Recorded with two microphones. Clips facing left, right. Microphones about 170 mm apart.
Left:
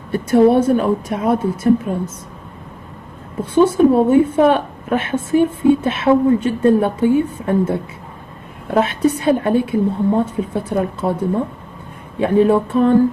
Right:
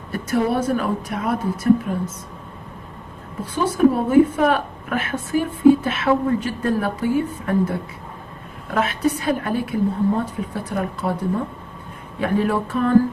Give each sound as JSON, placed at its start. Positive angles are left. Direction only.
{"t": 0.1, "sound": "a woman's voice", "side_deg": 30}
{"t": 3.6, "sound": "a woman's voice", "side_deg": 30}
{"t": 12.2, "sound": "a woman's voice", "side_deg": 25}